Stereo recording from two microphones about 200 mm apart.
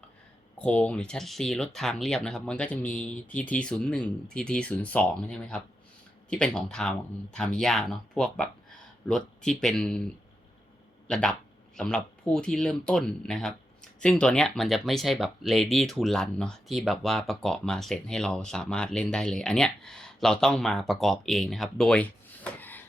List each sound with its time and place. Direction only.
0.6 s speech: 5° left (ahead or behind)
11.1 s speech: 5° left (ahead or behind)